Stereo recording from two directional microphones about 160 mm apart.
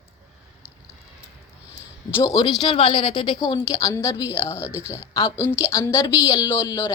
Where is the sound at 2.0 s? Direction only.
15° left (ahead or behind).